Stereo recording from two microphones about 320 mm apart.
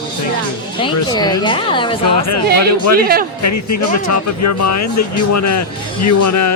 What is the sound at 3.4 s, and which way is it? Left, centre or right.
Speech, left.